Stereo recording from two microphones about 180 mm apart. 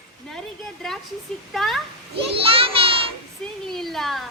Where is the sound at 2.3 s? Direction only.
30° right (ahead or behind).